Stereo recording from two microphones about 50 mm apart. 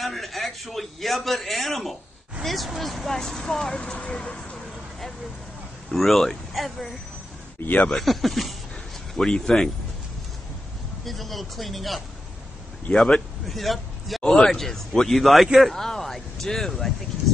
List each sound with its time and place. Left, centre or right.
0.0 s a man's voice: centre
5.9 s a man's voice: centre
7.6 s speech: left
8.0 s a man's voice: centre
9.2 s speech: centre
11.1 s a man's voice: centre
12.9 s speech: centre
13.5 s a man's voice: centre